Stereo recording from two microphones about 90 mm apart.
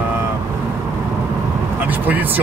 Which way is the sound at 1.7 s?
20° right (ahead or behind).